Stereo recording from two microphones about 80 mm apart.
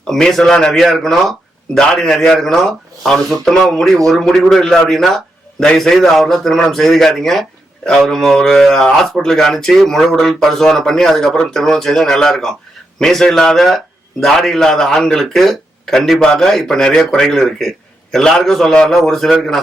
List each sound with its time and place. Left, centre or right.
0.1 s speech: centre